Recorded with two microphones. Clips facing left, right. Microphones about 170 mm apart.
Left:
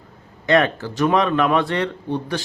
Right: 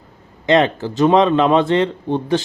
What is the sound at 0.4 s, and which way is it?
Speech, 20° right (ahead or behind).